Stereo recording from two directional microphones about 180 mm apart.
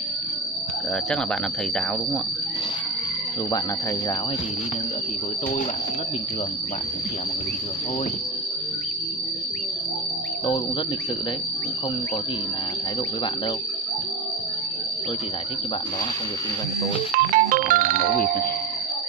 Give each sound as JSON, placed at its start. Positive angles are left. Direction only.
{"t": 17.3, "sound": "music", "side_deg": -45}